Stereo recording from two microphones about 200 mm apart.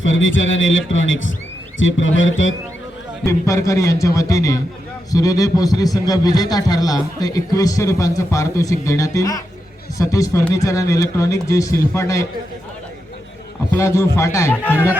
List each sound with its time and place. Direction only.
0.0 s a man's voice: 75° left (ahead or behind)
3.2 s speech: 15° left (ahead or behind)
13.7 s speech: 15° left (ahead or behind)